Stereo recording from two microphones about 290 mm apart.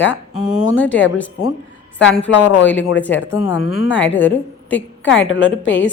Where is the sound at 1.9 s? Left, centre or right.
Centre.